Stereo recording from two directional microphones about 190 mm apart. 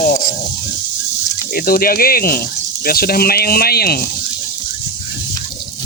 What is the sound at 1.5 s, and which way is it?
Speech, 50° left (ahead or behind).